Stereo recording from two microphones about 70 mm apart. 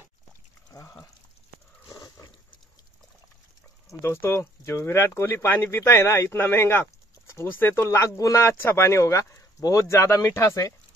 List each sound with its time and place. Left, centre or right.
0.7 s a sound: left
4.0 s speech: left
9.9 s speech: left